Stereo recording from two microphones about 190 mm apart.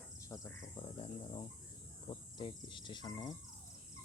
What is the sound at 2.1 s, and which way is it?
Speech, 25° left (ahead or behind).